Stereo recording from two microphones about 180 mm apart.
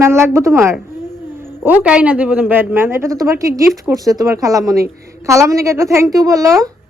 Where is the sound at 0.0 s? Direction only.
15° right (ahead or behind).